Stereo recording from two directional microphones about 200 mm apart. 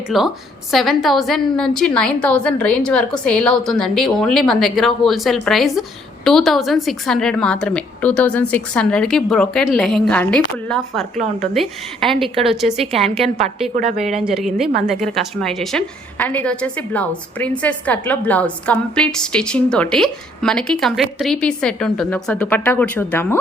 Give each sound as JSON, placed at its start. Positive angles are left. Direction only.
{"t": 0.1, "sound": "a woman's voice", "side_deg": 0}
{"t": 12.3, "sound": "a woman's voice", "side_deg": -30}
{"t": 12.5, "sound": "a woman's voice", "side_deg": 0}
{"t": 13.7, "sound": "speech", "side_deg": -40}
{"t": 14.2, "sound": "a woman's voice", "side_deg": 0}